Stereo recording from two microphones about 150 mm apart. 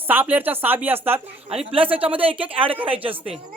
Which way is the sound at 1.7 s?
35° right (ahead or behind).